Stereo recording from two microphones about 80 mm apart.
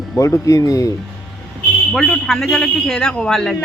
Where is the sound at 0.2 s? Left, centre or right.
Left.